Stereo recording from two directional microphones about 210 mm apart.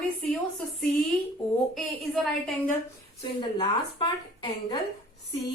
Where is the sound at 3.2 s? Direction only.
25° left (ahead or behind).